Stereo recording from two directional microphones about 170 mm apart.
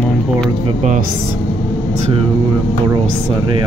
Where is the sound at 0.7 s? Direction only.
45° right (ahead or behind).